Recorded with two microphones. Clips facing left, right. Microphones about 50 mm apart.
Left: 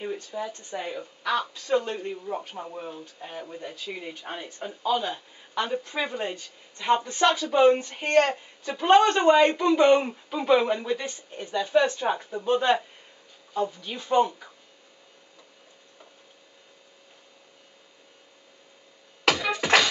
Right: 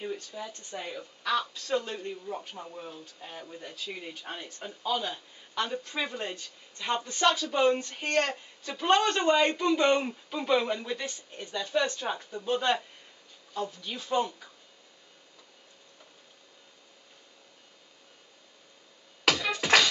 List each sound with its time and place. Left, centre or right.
0.0 s a sound: centre
0.5 s speech: centre
19.2 s scratching: centre